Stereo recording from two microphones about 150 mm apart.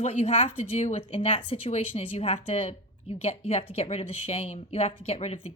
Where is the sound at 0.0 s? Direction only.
50° left (ahead or behind).